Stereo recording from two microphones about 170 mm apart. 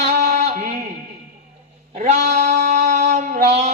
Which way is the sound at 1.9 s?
45° right (ahead or behind).